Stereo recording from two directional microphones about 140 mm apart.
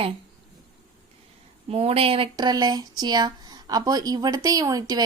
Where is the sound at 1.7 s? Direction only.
45° right (ahead or behind).